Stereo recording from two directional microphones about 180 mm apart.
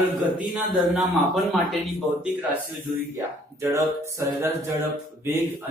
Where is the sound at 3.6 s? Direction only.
15° right (ahead or behind).